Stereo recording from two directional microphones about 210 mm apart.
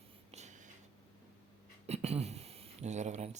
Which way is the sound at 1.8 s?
30° right (ahead or behind).